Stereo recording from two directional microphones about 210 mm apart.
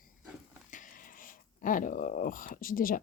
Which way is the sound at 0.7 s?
40° left (ahead or behind).